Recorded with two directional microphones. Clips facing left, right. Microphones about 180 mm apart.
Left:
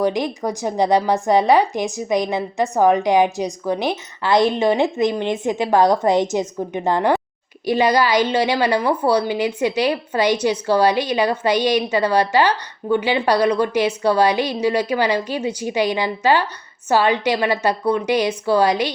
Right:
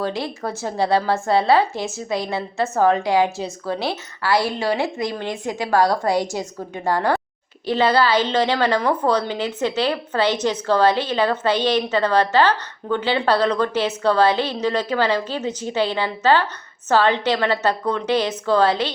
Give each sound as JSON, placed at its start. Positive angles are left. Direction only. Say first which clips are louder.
{"t": 0.0, "sound": "a woman's voice", "louder": "left 5 dB", "side_deg": 15}